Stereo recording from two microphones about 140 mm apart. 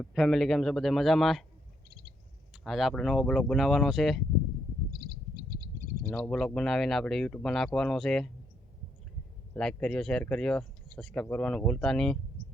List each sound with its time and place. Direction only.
0.0 s speech: centre (ahead or behind)
1.9 s owl: 90° right
2.5 s speech: centre (ahead or behind)
6.0 s speech: 10° left (ahead or behind)
9.6 s speech: 5° left (ahead or behind)